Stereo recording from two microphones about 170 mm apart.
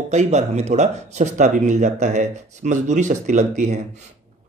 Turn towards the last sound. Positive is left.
turn(degrees=-45)  # may be behind; listen again after turning